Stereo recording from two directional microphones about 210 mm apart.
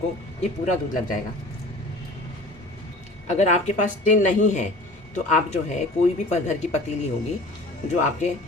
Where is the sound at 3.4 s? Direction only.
35° left (ahead or behind).